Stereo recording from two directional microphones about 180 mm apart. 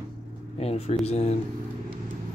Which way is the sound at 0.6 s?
35° left (ahead or behind).